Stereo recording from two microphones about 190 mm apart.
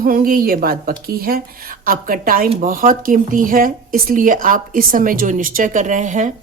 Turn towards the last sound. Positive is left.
turn(degrees=-40)  # may be behind; listen again after turning